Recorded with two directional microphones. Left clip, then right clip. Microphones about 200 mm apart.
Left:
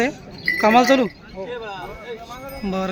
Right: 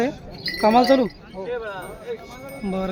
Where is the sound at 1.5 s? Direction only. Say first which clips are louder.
Right 3 dB; 45° left (ahead or behind).